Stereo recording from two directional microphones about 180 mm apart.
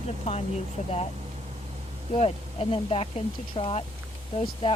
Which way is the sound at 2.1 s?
35° left (ahead or behind).